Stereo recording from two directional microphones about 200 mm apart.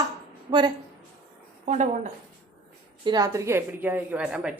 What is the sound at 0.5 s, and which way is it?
Speech, 25° right (ahead or behind).